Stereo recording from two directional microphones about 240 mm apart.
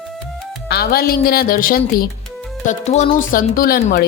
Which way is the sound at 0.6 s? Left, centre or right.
Left.